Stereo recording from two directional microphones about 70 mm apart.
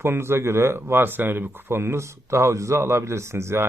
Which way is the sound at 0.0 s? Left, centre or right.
Right.